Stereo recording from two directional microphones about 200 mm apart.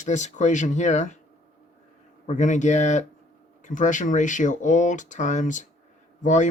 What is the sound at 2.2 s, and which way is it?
Speech, 40° left (ahead or behind).